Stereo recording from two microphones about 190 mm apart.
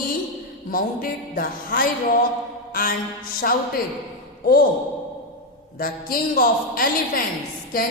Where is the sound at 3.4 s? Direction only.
50° left (ahead or behind).